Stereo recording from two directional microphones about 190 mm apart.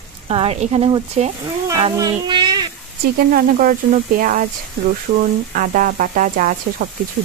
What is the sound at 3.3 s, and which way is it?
A woman's voice, 45° right (ahead or behind).